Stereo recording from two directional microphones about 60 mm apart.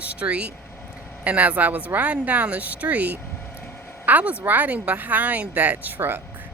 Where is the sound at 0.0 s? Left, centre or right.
Right.